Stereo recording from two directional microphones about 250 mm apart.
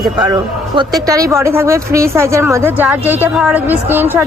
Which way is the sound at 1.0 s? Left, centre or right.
Centre.